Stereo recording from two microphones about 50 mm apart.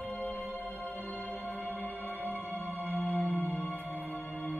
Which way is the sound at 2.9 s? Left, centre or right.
Left.